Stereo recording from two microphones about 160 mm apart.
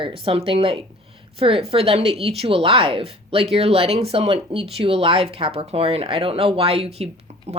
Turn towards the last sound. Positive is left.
turn(degrees=-40)  # may be behind; listen again after turning